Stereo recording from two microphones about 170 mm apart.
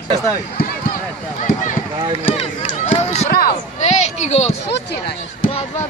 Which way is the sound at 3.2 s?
65° left (ahead or behind).